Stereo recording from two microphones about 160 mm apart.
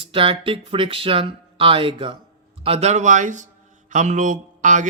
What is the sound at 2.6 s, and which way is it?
A man's voice, 40° right (ahead or behind).